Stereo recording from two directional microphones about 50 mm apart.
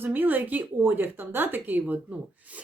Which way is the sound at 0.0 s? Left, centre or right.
Right.